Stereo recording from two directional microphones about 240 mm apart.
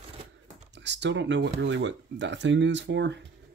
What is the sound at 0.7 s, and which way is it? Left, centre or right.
Speech, right.